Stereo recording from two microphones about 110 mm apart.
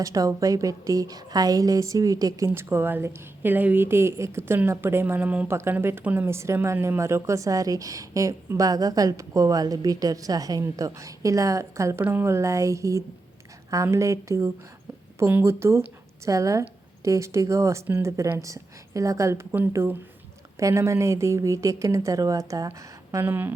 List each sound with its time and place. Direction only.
0.0 s a woman's voice: 30° right (ahead or behind)
2.5 s speech: 20° right (ahead or behind)
18.2 s speech: 30° right (ahead or behind)
23.2 s speech: 20° right (ahead or behind)